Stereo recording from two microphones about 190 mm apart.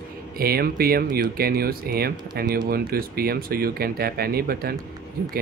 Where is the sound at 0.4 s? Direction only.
50° right (ahead or behind).